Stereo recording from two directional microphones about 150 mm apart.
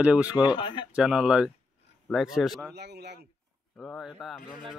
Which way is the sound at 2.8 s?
90° right.